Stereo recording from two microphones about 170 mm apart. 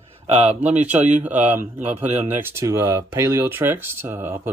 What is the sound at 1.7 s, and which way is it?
Speech, 40° right (ahead or behind).